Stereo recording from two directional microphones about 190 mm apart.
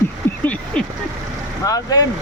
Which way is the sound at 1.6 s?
20° left (ahead or behind).